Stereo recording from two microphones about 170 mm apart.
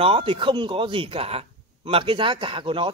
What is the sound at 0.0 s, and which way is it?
A man's voice, 35° right (ahead or behind).